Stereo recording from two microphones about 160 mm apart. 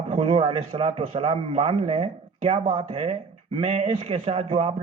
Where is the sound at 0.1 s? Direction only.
35° right (ahead or behind).